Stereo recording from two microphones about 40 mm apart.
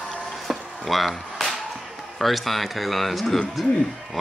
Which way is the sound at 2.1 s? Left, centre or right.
Centre.